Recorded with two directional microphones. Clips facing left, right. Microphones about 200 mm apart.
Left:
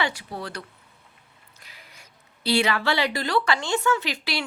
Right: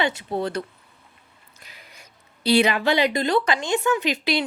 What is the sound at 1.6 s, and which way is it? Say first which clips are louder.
Speech: right 3 dB; 20° right (ahead or behind).